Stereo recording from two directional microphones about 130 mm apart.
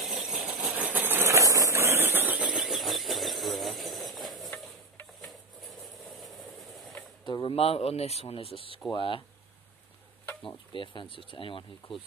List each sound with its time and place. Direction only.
0.0 s a sound: 5° right (ahead or behind)
6.2 s train: centre (ahead or behind)
7.2 s speech: 40° left (ahead or behind)
10.4 s speech: 40° left (ahead or behind)